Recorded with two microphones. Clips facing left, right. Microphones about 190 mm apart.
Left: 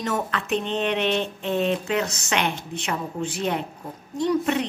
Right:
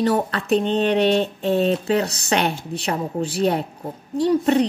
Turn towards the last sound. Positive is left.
turn(degrees=-35)  # may be behind; listen again after turning